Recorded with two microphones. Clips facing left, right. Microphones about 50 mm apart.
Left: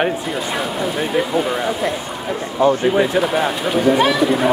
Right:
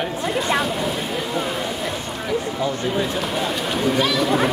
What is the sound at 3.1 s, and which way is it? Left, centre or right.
Speech, centre.